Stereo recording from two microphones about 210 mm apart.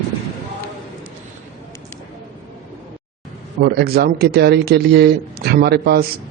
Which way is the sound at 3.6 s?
50° right (ahead or behind).